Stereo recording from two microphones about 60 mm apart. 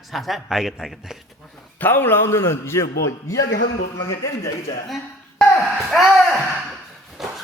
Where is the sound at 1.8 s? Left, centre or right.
Left.